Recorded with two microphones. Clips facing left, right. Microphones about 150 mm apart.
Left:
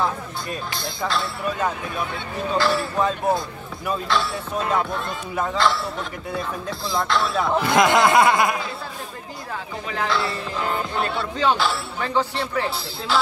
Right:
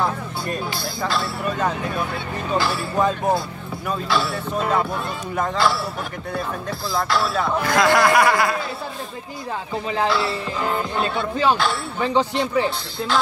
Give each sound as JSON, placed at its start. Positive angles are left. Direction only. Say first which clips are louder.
{"t": 0.7, "sound": "speech", "louder": "right 1 dB", "side_deg": 0}
{"t": 2.5, "sound": "speech", "louder": "even", "side_deg": -10}
{"t": 6.9, "sound": "speech", "louder": "right 1 dB", "side_deg": -5}
{"t": 7.6, "sound": "speech", "louder": "even", "side_deg": 20}
{"t": 10.0, "sound": "speech", "louder": "even", "side_deg": -5}
{"t": 12.6, "sound": "speech", "louder": "right 2 dB", "side_deg": 5}